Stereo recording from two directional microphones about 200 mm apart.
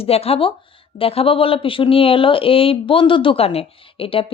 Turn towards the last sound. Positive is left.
turn(degrees=25)  # may be behind; listen again after turning